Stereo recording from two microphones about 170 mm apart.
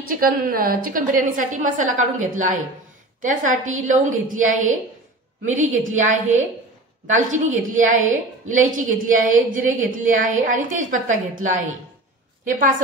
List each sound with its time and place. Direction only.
0.2 s a woman's voice: 60° right (ahead or behind)